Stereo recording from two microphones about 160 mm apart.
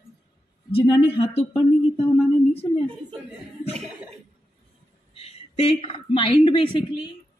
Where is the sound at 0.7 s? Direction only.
40° left (ahead or behind).